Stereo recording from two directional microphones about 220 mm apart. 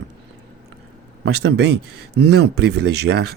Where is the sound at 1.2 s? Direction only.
50° right (ahead or behind).